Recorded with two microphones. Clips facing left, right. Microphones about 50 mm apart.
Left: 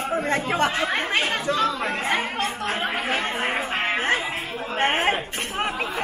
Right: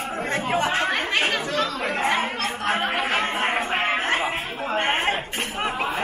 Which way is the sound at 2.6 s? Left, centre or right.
Right.